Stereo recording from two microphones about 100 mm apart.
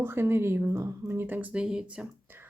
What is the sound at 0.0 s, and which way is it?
Speech, 25° right (ahead or behind).